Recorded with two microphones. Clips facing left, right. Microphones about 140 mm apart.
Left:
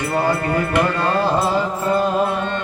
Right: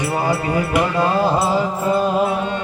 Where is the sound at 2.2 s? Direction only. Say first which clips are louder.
Right 1 dB; 10° right (ahead or behind).